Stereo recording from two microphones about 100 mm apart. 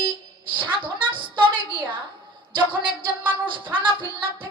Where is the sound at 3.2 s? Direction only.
55° right (ahead or behind).